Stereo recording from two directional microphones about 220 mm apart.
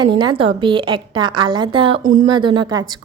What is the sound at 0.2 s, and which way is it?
A woman's voice, 20° right (ahead or behind).